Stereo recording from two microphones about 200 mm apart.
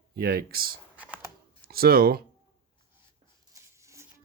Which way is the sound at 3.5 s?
15° right (ahead or behind).